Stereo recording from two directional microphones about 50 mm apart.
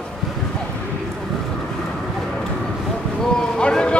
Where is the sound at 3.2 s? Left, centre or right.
Centre.